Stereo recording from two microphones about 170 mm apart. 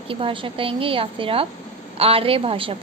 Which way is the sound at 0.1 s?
30° right (ahead or behind).